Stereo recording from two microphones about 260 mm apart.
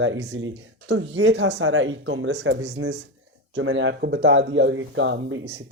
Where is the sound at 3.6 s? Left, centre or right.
Right.